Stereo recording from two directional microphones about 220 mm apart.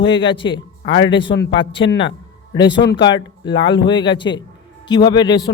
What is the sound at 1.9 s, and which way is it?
A man's voice, 55° left (ahead or behind).